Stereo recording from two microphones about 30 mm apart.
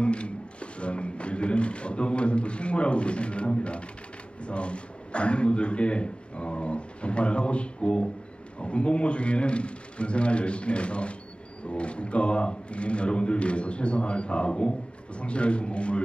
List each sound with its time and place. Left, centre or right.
0.0 s speech: left